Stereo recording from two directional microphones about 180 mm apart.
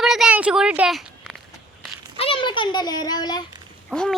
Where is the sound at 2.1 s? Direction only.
30° left (ahead or behind).